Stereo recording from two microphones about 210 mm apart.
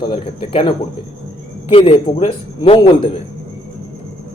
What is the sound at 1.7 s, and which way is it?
A man's voice, 25° left (ahead or behind).